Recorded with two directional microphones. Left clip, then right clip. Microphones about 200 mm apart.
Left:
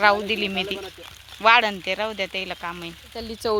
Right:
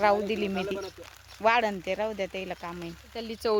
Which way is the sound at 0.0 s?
10° right (ahead or behind).